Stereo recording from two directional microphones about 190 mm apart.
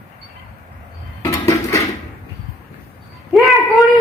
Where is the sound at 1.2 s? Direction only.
15° left (ahead or behind).